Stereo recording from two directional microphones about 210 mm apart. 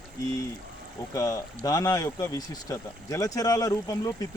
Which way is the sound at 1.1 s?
15° left (ahead or behind).